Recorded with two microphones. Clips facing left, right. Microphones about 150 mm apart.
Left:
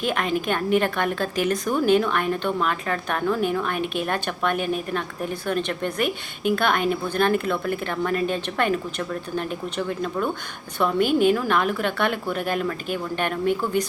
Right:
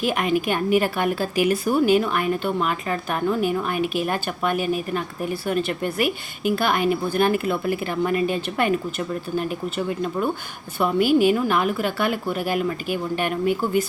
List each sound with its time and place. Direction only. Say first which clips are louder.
0.0 s a woman's voice: right 2 dB; 5° right (ahead or behind)